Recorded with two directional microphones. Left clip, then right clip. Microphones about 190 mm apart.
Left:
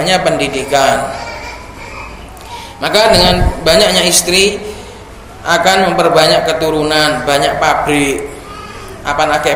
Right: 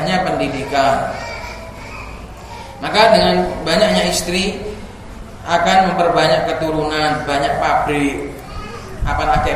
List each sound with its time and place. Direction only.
0.0 s a man's voice: 50° left (ahead or behind)
2.8 s a man's voice: 50° left (ahead or behind)
5.5 s a man's voice: 50° left (ahead or behind)